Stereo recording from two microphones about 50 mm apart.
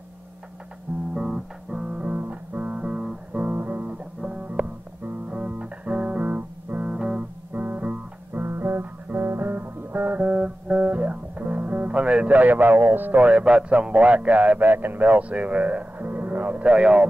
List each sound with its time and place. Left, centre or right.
1.1 s guitar: centre
3.3 s music: right
7.0 s music: centre
7.5 s music: right
8.4 s music: right
14.6 s speech: right
16.6 s speech: right